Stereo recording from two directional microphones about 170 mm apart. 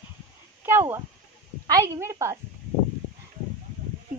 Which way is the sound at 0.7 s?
15° right (ahead or behind).